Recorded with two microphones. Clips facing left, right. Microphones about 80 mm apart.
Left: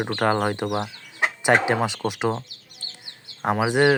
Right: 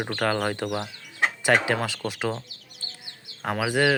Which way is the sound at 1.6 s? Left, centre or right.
Centre.